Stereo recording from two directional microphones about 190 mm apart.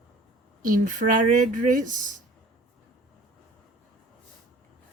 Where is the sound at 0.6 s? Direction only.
45° right (ahead or behind).